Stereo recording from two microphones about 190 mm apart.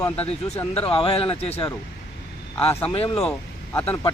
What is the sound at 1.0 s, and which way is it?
Speech, 30° left (ahead or behind).